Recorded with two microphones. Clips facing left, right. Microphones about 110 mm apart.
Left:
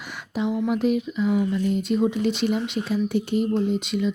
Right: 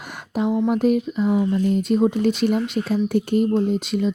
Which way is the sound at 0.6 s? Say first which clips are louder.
Right 3 dB; 40° right (ahead or behind).